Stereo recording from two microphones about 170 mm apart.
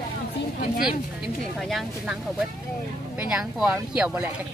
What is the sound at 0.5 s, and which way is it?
Speech, 55° left (ahead or behind).